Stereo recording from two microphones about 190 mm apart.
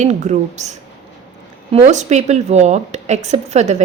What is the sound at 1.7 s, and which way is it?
A woman's voice, 40° right (ahead or behind).